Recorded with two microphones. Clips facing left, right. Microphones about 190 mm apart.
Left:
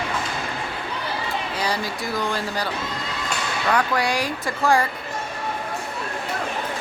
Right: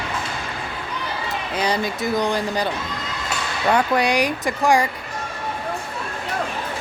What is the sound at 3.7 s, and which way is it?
Speech, 20° right (ahead or behind).